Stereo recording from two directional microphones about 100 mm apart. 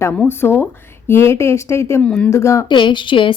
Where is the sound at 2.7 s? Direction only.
50° left (ahead or behind).